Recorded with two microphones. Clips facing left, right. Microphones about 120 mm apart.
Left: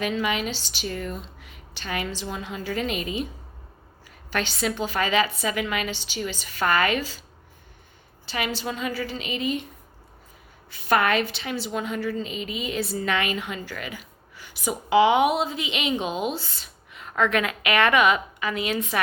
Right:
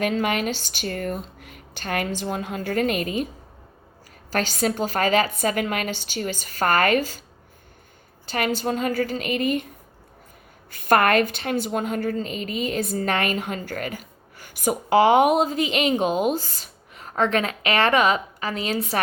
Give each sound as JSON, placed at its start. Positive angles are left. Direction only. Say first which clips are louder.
{"t": 0.0, "sound": "a woman's voice", "louder": "right 3 dB", "side_deg": -50}
{"t": 4.3, "sound": "a woman's voice", "louder": "right 3 dB", "side_deg": -40}
{"t": 8.3, "sound": "a woman's voice", "louder": "right 5 dB", "side_deg": -45}
{"t": 10.7, "sound": "a woman's voice", "louder": "right 3 dB", "side_deg": -50}